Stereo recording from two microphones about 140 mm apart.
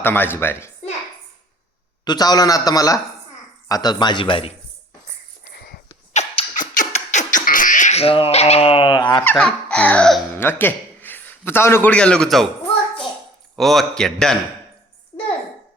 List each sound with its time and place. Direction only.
0.0 s a sound: 15° left (ahead or behind)
2.0 s a man's voice: 30° left (ahead or behind)
6.1 s beatboxing: 55° left (ahead or behind); by 9.2 s 30° left (ahead or behind)
9.3 s a sound: 5° left (ahead or behind)
10.3 s a man's voice: 15° left (ahead or behind)
13.6 s a man's voice: centre (ahead or behind)